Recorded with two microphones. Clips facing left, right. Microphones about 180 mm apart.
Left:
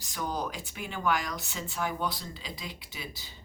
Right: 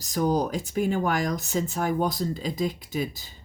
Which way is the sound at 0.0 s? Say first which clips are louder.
Right 10 dB; 40° right (ahead or behind).